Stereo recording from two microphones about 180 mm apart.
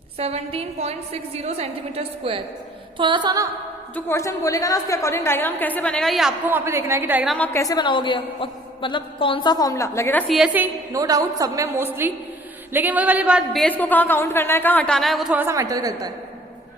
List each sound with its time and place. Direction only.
0.2 s a woman's voice: 35° right (ahead or behind)
3.0 s a sound: 25° right (ahead or behind)
3.9 s a man's voice: 15° left (ahead or behind); by 7.3 s 10° right (ahead or behind)
7.3 s a man's voice: 10° left (ahead or behind); by 16.1 s 20° right (ahead or behind)